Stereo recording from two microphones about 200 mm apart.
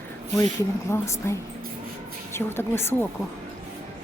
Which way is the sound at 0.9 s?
15° left (ahead or behind).